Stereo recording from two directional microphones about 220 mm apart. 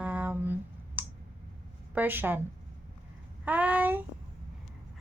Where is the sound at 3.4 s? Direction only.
5° right (ahead or behind).